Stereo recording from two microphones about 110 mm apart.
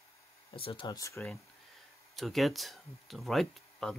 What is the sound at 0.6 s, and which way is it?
Speech, 55° left (ahead or behind).